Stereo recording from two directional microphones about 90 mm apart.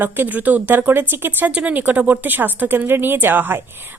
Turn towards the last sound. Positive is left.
turn(degrees=-25)  # may be behind; listen again after turning